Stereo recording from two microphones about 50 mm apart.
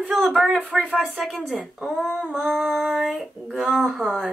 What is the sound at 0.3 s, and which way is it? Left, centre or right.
Female singing, centre.